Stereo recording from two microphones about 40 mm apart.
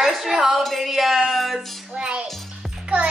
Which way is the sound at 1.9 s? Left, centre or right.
Right.